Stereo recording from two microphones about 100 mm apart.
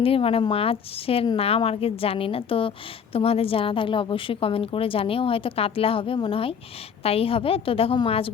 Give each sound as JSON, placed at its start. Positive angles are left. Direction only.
{"t": 0.0, "sound": "a woman's voice", "side_deg": 70}
{"t": 7.0, "sound": "a woman's voice", "side_deg": 75}